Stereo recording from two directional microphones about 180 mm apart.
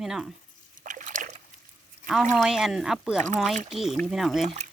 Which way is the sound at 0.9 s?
45° right (ahead or behind).